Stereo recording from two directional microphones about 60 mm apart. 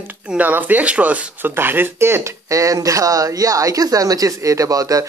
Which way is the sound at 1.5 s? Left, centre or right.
Right.